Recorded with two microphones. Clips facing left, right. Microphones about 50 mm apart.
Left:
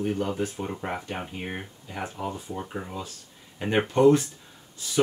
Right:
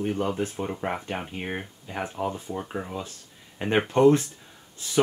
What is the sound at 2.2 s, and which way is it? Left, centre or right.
Speech, right.